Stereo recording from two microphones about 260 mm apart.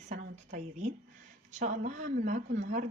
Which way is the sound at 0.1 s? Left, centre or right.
Right.